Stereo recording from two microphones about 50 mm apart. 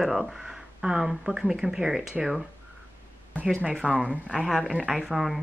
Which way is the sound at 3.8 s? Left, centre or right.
Centre.